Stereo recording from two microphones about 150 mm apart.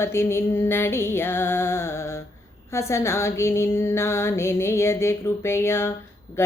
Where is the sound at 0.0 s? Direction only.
15° left (ahead or behind).